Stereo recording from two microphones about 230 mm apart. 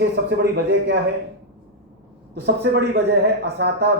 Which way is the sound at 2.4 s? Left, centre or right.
Right.